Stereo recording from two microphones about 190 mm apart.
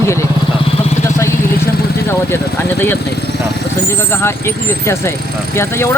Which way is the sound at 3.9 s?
15° left (ahead or behind).